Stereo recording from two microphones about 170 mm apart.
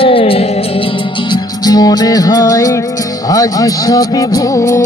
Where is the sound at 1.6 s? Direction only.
25° left (ahead or behind).